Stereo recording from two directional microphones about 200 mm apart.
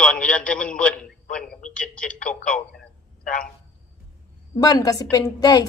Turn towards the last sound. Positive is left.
turn(degrees=20)  # may be behind; listen again after turning